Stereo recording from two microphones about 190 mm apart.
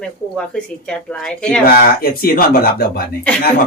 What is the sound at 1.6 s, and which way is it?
Speech, 50° left (ahead or behind).